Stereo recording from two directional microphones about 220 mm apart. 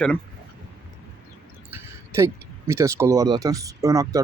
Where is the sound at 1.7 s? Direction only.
15° right (ahead or behind).